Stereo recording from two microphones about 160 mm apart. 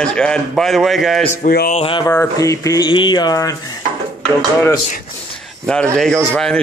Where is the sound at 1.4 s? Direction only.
65° left (ahead or behind).